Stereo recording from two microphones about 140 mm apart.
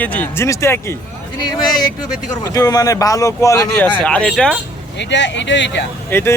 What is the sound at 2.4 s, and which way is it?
Speech, 25° left (ahead or behind).